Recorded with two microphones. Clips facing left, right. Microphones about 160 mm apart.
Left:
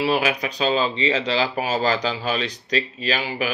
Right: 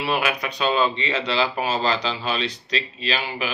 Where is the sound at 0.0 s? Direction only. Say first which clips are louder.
Left 3 dB; 35° left (ahead or behind).